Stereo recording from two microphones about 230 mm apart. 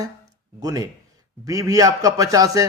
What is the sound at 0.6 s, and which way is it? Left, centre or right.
Speech, centre.